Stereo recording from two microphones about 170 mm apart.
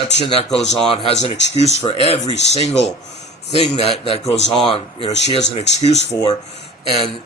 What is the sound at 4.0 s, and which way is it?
A man's voice, 30° left (ahead or behind).